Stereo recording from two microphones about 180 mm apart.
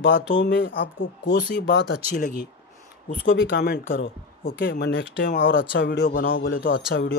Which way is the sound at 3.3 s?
65° left (ahead or behind).